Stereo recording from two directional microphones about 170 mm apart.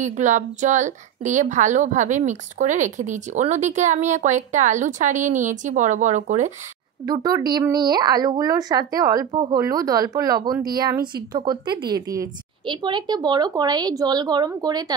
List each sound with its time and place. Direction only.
0.0 s a woman's voice: 45° right (ahead or behind)
7.1 s a woman's voice: 20° right (ahead or behind)